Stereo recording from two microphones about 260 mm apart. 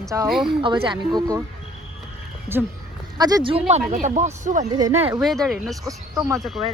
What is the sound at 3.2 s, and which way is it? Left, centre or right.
Speech, centre.